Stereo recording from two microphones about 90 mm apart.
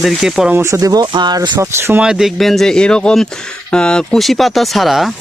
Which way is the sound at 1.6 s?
25° right (ahead or behind).